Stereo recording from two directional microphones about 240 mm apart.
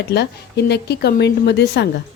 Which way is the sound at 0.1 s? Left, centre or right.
Left.